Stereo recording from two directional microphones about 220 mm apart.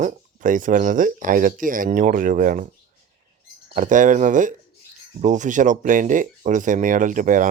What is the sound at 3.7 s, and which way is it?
Speech, 35° right (ahead or behind).